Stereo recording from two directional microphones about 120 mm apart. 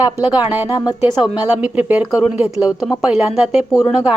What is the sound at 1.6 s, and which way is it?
A woman's voice, 15° right (ahead or behind).